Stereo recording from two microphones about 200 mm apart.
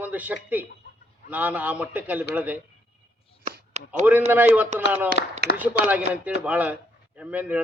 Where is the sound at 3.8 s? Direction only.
35° right (ahead or behind).